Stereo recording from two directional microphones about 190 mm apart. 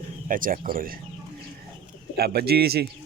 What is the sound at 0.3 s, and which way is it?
Speech, 45° right (ahead or behind).